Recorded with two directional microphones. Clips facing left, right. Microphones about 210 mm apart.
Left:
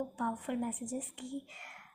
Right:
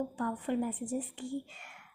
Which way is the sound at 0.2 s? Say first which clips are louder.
Right 3 dB; 35° right (ahead or behind).